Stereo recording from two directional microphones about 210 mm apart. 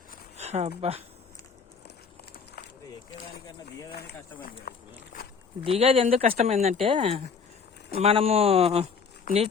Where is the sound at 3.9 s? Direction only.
50° left (ahead or behind).